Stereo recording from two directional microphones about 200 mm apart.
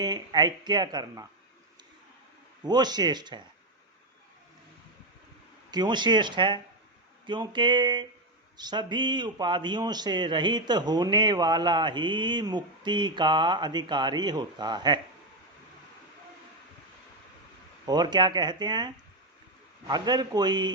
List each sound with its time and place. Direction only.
0.0 s a man's voice: 20° right (ahead or behind)
2.6 s a man's voice: 20° right (ahead or behind)
5.7 s a man's voice: 20° right (ahead or behind)
17.8 s a man's voice: 20° right (ahead or behind)
19.9 s a man's voice: 20° right (ahead or behind)